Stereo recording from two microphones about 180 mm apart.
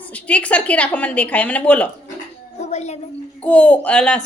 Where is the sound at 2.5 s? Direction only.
40° left (ahead or behind).